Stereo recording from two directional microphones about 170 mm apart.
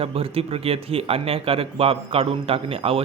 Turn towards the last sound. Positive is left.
turn(degrees=-35)  # may be behind; listen again after turning